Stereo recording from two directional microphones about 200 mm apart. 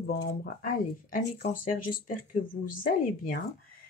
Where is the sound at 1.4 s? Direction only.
45° left (ahead or behind).